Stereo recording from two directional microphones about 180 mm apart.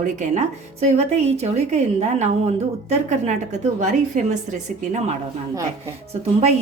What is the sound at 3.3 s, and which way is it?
A woman's voice, 40° right (ahead or behind).